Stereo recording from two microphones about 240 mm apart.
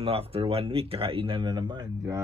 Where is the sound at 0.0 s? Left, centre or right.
Right.